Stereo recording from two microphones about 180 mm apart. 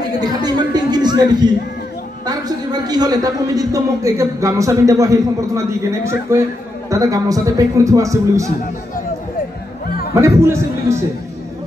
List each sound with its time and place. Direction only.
0.2 s a man's voice: 25° right (ahead or behind)
9.8 s music: 60° left (ahead or behind)
10.1 s a man's voice: 15° right (ahead or behind)